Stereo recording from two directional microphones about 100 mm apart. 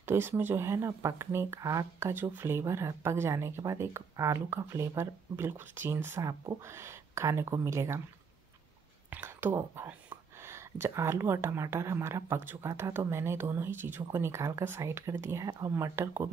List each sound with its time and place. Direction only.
0.0 s speech: 25° right (ahead or behind)
9.1 s speech: 25° right (ahead or behind)